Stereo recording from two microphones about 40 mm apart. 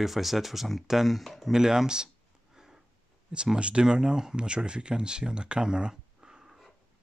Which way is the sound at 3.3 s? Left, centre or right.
Right.